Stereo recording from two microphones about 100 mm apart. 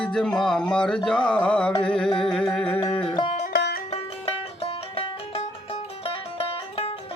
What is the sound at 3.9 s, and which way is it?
Music, 80° left.